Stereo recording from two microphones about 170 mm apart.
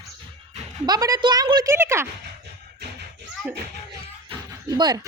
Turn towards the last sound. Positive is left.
turn(degrees=-25)  # may be behind; listen again after turning